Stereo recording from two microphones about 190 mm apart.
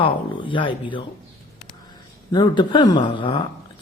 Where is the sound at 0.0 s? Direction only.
25° left (ahead or behind).